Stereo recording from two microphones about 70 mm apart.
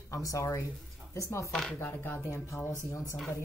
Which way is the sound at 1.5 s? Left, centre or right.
Centre.